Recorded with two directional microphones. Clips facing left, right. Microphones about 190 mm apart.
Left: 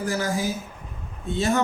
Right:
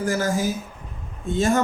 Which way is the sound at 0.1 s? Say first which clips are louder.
Right 3 dB; 45° right (ahead or behind).